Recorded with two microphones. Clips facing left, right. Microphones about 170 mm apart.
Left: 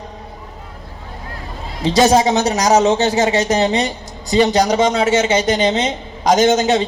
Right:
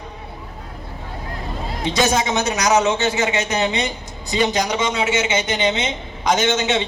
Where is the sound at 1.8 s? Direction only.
35° left (ahead or behind).